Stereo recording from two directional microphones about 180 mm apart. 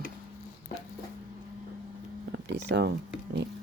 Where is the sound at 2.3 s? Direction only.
75° right (ahead or behind).